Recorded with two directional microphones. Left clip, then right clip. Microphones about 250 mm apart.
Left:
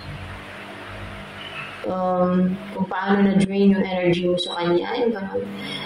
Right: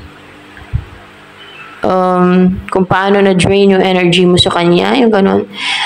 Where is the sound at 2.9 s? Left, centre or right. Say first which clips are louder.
Right 11 dB; right.